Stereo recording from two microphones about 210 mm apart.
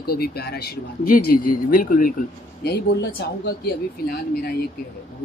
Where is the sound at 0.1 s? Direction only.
50° left (ahead or behind).